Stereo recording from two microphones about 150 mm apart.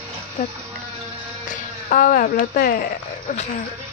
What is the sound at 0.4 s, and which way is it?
Speech, 60° left (ahead or behind).